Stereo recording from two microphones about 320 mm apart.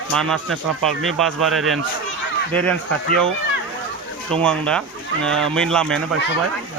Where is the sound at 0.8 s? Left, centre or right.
Centre.